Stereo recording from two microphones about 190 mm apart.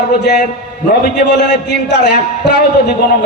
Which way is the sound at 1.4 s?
65° left (ahead or behind).